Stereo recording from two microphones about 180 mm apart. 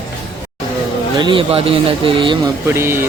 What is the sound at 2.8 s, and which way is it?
Speech, 15° right (ahead or behind).